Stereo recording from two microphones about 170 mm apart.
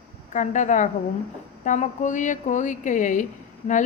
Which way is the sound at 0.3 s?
45° left (ahead or behind).